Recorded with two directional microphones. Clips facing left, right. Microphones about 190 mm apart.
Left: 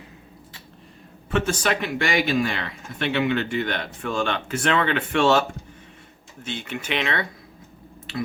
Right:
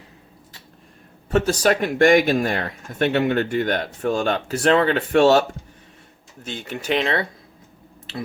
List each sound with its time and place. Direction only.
1.3 s speech: 40° right (ahead or behind)